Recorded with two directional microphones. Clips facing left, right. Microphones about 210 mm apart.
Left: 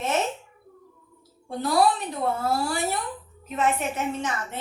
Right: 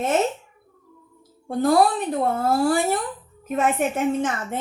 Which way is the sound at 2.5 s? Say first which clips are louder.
Right 6 dB; 50° right (ahead or behind).